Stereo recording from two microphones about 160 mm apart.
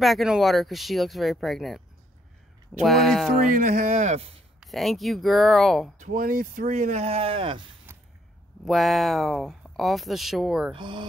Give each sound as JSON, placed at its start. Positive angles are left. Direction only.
{"t": 0.0, "sound": "speech", "side_deg": 0}
{"t": 2.8, "sound": "speech", "side_deg": 0}
{"t": 3.5, "sound": "speech", "side_deg": -50}
{"t": 4.6, "sound": "speech", "side_deg": 0}
{"t": 5.9, "sound": "speech", "side_deg": -55}
{"t": 8.6, "sound": "speech", "side_deg": 0}
{"t": 10.7, "sound": "speech", "side_deg": -30}